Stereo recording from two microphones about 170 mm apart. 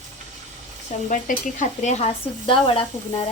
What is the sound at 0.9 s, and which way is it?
A woman's voice, 50° left (ahead or behind).